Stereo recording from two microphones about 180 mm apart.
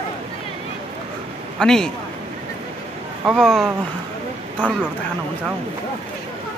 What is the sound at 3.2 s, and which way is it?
Speech, centre (ahead or behind).